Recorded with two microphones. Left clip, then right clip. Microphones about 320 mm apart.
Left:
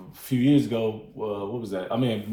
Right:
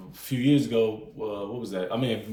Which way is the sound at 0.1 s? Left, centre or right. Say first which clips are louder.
Left 2 dB; centre.